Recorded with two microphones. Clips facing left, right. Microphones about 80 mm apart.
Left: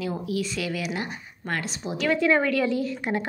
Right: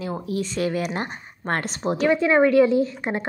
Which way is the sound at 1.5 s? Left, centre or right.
Right.